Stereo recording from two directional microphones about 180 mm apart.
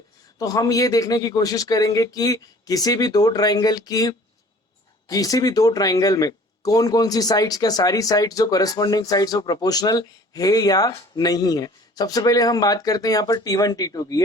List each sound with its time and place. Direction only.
0.3 s speech: 20° left (ahead or behind)